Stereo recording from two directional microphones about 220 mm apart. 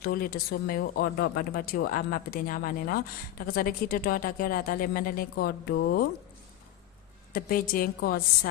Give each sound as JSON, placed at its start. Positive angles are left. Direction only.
{"t": 0.0, "sound": "speech", "side_deg": 40}
{"t": 7.3, "sound": "speech", "side_deg": 40}